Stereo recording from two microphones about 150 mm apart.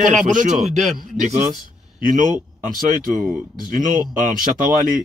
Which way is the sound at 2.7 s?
70° right (ahead or behind).